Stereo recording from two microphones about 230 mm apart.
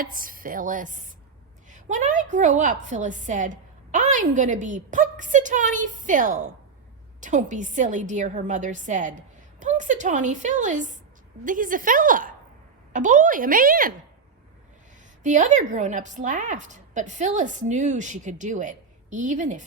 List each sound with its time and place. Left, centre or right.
0.0 s a woman's voice: right
15.2 s a woman's voice: right